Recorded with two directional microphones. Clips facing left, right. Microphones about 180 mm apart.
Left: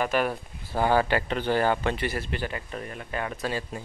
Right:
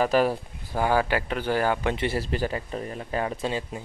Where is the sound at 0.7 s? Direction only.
10° right (ahead or behind).